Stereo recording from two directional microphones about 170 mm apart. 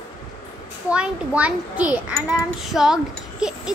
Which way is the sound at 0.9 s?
5° right (ahead or behind).